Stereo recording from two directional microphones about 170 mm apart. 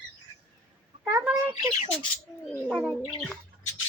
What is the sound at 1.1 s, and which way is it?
Bird, 10° right (ahead or behind).